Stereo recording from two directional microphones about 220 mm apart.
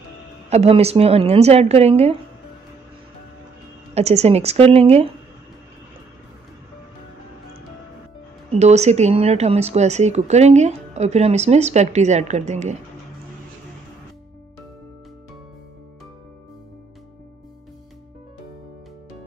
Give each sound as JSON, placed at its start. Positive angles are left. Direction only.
{"t": 0.5, "sound": "a woman's voice", "side_deg": -30}
{"t": 3.9, "sound": "a woman's voice", "side_deg": -30}
{"t": 8.5, "sound": "speech", "side_deg": -30}